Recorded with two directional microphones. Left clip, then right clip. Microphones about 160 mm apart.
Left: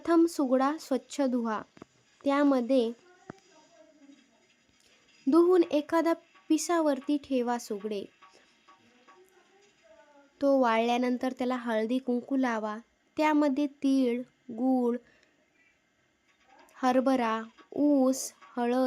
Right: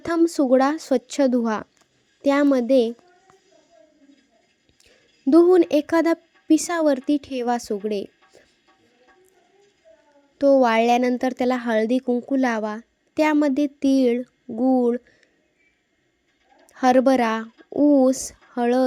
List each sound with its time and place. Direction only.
0.3 s speech: 30° right (ahead or behind)
5.3 s speech: 30° right (ahead or behind)
10.3 s speech: 25° right (ahead or behind)
12.0 s speech: 15° right (ahead or behind)
12.3 s a woman's voice: 30° right (ahead or behind)
16.6 s speech: 30° right (ahead or behind)